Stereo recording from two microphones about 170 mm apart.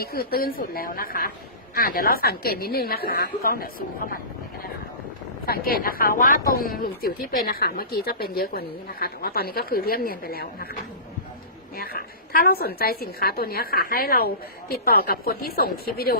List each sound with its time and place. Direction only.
0.0 s speech: 65° left (ahead or behind)
5.5 s speech: 60° left (ahead or behind)
11.8 s speech: 60° left (ahead or behind)